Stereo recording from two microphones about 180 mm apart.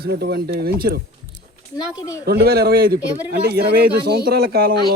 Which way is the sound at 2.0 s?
15° left (ahead or behind).